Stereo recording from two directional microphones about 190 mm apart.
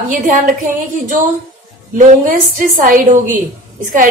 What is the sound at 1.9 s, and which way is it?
A woman's voice, 45° right (ahead or behind).